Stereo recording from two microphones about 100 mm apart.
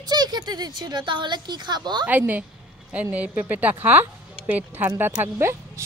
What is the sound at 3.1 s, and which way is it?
A woman's voice, 15° right (ahead or behind).